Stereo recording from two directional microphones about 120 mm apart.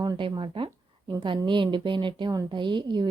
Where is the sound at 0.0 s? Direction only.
35° right (ahead or behind).